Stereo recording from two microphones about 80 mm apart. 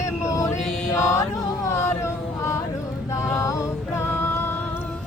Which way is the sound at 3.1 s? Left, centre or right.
Left.